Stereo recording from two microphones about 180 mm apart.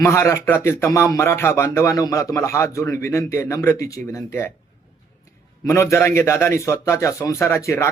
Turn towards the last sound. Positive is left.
turn(degrees=15)  # may be behind; listen again after turning